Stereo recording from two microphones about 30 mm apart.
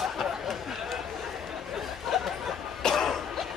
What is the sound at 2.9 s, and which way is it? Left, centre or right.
Cough, centre.